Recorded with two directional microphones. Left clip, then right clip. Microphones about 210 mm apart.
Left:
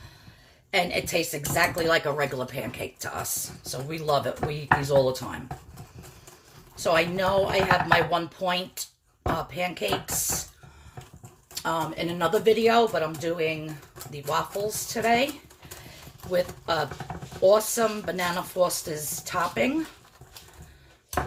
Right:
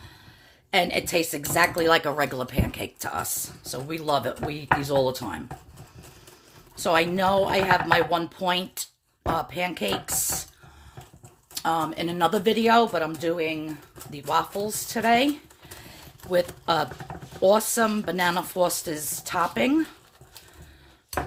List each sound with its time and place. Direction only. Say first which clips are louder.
0.7 s speech: right 2 dB; 50° right (ahead or behind)
6.7 s speech: right 1 dB; 50° right (ahead or behind)
11.5 s speech: right 3 dB; 45° right (ahead or behind)
16.3 s speech: right 3 dB; 50° right (ahead or behind)